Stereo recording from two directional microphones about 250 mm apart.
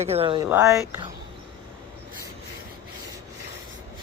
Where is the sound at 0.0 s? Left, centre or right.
Right.